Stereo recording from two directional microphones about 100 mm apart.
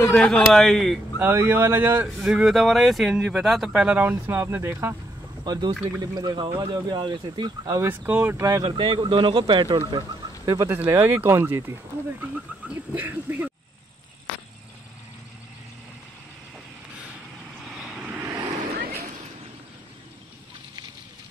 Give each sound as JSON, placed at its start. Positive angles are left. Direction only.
{"t": 0.1, "sound": "speech", "side_deg": 5}
{"t": 1.1, "sound": "speech", "side_deg": -20}
{"t": 2.3, "sound": "speech", "side_deg": -5}
{"t": 5.4, "sound": "speech", "side_deg": -45}
{"t": 7.8, "sound": "speech", "side_deg": -20}
{"t": 8.4, "sound": "speech", "side_deg": -35}
{"t": 8.6, "sound": "speech", "side_deg": -50}
{"t": 10.7, "sound": "speech", "side_deg": -25}
{"t": 12.6, "sound": "a sound", "side_deg": -15}
{"t": 17.6, "sound": "vehicle", "side_deg": -5}
{"t": 18.2, "sound": "vehicle", "side_deg": -25}